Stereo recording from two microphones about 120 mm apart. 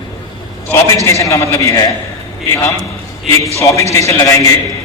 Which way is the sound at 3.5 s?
25° left (ahead or behind).